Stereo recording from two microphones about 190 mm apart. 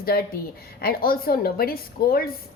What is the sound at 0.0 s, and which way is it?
A woman's voice, 50° left (ahead or behind).